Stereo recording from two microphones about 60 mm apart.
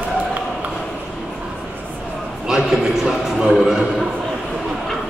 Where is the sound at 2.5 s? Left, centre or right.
Centre.